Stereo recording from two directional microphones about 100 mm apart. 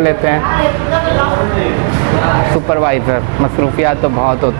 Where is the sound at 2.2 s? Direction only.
20° right (ahead or behind).